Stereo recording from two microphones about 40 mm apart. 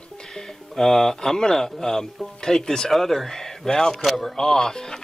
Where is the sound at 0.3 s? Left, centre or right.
Centre.